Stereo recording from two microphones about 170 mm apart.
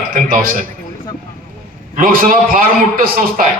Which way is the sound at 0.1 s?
55° right (ahead or behind).